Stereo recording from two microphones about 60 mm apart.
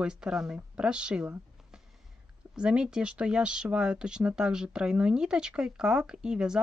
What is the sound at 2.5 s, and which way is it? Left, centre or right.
Speech, centre.